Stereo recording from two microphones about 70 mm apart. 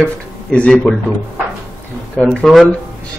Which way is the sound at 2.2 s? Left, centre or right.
Centre.